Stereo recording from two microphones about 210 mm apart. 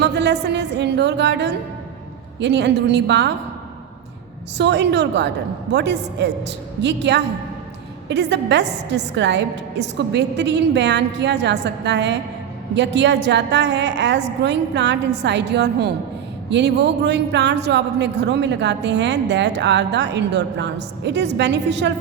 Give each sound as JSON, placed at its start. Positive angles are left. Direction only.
{"t": 0.0, "sound": "a man's voice", "side_deg": -55}
{"t": 4.5, "sound": "a man's voice", "side_deg": -55}